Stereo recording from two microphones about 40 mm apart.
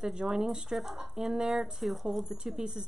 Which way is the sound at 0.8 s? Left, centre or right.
Centre.